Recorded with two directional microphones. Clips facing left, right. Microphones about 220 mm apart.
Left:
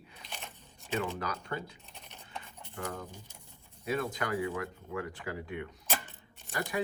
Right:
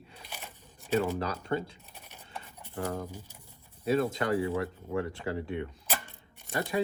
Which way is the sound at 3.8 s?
30° right (ahead or behind).